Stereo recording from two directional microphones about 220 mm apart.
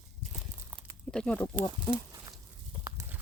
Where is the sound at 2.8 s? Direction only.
15° right (ahead or behind).